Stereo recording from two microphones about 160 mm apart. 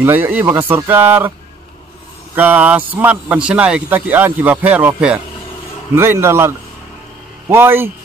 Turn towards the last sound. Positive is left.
turn(degrees=-15)  # may be behind; listen again after turning